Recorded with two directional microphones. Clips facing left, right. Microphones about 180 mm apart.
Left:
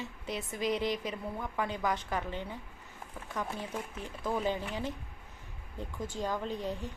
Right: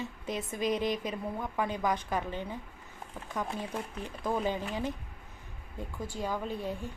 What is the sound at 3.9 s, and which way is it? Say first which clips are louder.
Speech: right 2 dB; 15° right (ahead or behind).